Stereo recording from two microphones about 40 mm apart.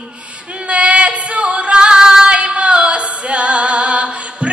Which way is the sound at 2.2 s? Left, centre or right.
Right.